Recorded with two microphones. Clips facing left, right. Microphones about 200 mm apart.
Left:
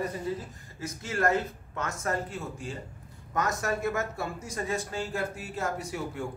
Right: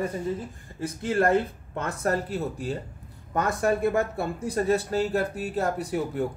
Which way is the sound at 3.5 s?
30° right (ahead or behind).